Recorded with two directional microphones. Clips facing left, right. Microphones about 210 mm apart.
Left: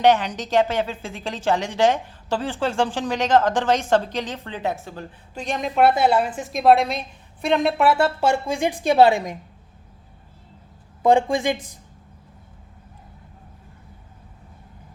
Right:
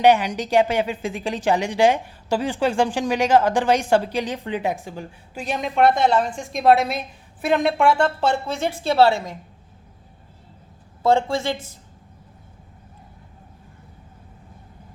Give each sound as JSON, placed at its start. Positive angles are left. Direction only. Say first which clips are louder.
{"t": 0.0, "sound": "a woman's voice", "louder": "right 1 dB", "side_deg": -10}
{"t": 11.0, "sound": "speech", "louder": "left 2 dB", "side_deg": 15}